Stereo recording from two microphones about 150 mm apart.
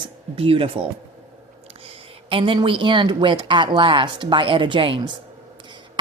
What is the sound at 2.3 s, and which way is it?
Speech, 35° right (ahead or behind).